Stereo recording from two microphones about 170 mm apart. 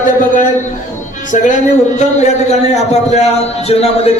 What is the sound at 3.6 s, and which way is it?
Speech, 35° left (ahead or behind).